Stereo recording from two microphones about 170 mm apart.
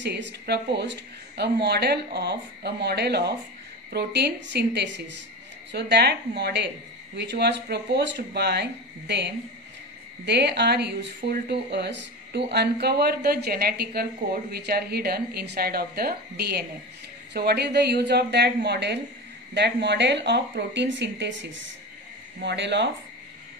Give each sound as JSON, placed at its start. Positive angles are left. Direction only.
{"t": 0.0, "sound": "a woman's voice", "side_deg": -85}